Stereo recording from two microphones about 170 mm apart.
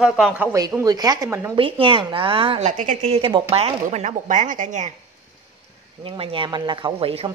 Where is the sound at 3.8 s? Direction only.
45° right (ahead or behind).